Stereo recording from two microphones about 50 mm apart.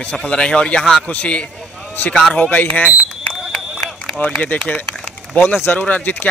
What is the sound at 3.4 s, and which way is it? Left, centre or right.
Run, centre.